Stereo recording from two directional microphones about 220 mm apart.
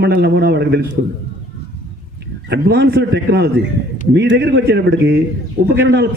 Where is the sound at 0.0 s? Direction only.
50° right (ahead or behind).